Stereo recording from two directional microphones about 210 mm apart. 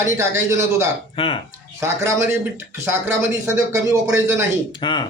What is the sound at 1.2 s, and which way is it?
Speech, 25° left (ahead or behind).